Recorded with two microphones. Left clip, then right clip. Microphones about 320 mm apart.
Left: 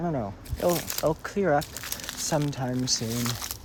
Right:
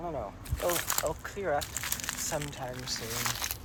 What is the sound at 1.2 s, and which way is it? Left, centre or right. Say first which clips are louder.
Speech: left 9 dB; left.